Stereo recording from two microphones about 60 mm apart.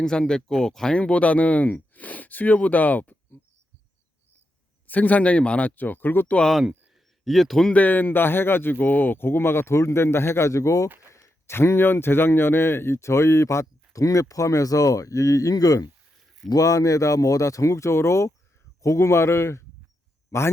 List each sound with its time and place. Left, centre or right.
0.0 s speech: centre; by 3.2 s left
4.9 s speech: left
6.5 s speech: centre
7.7 s a man's voice: left
10.8 s speech: right
11.1 s a man's voice: left
13.9 s a man's voice: left